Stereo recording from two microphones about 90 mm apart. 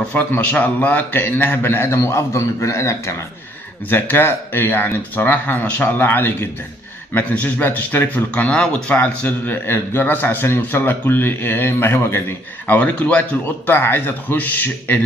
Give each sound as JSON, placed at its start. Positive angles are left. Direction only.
{"t": 0.1, "sound": "speech", "side_deg": 20}